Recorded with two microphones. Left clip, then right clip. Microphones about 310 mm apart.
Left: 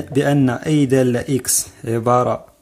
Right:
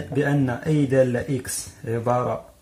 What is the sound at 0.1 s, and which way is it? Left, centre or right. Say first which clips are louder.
Speech: left 6 dB; left.